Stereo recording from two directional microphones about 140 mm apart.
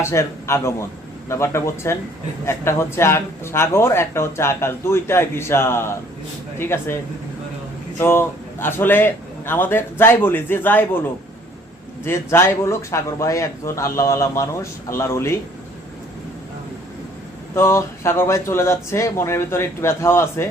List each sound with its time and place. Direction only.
0.0 s a man's voice: 20° left (ahead or behind)
12.0 s speech: 20° left (ahead or behind)
17.5 s speech: 20° left (ahead or behind)